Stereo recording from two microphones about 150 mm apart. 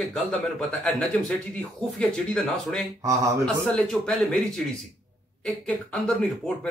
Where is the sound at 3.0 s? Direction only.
20° right (ahead or behind).